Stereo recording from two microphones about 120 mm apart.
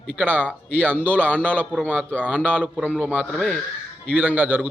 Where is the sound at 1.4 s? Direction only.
10° left (ahead or behind).